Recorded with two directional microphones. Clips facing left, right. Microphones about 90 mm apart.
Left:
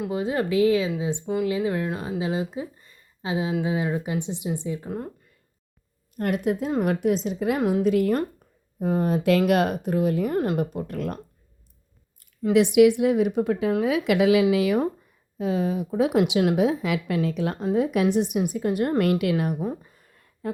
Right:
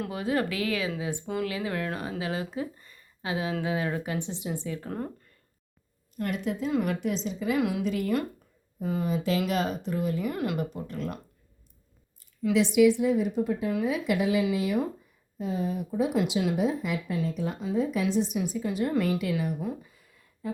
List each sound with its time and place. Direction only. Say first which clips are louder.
0.0 s speech: left 3 dB; 20° left (ahead or behind)
6.1 s speech: left 6 dB; 55° left (ahead or behind)
7.6 s speech: left 7 dB; 40° left (ahead or behind)
12.4 s speech: left 5 dB; 50° left (ahead or behind)
19.6 s a sound: left 4 dB; 45° left (ahead or behind)